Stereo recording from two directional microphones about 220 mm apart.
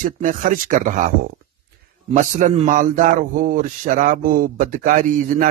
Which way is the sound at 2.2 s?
35° right (ahead or behind).